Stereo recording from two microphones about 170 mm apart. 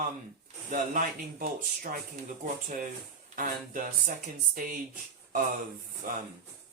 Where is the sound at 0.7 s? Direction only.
55° right (ahead or behind).